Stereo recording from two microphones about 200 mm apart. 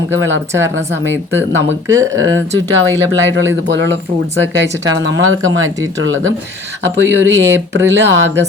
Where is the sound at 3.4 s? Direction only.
65° right (ahead or behind).